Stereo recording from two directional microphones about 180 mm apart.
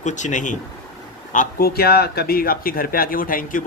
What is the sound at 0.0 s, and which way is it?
Speech, 40° left (ahead or behind).